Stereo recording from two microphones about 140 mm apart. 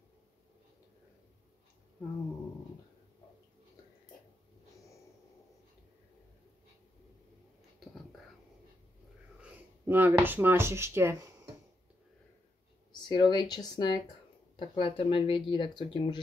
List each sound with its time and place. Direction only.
9.4 s speech: 15° right (ahead or behind)
12.9 s speech: 30° left (ahead or behind)